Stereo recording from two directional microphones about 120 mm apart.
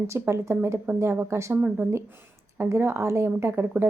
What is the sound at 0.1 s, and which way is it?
A woman's voice, 20° right (ahead or behind).